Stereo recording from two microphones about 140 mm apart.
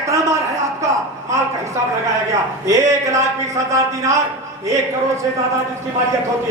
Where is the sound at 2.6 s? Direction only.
20° right (ahead or behind).